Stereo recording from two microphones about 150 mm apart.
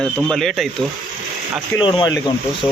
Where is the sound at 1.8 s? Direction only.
30° left (ahead or behind).